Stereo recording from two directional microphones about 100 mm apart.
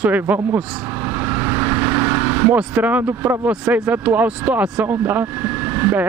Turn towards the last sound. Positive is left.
turn(degrees=-20)  # may be behind; listen again after turning